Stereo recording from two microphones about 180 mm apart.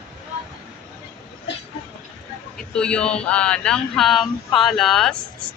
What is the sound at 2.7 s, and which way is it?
Speech, 5° left (ahead or behind).